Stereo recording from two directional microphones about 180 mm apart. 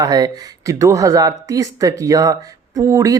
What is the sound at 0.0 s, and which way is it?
Speech, 20° right (ahead or behind).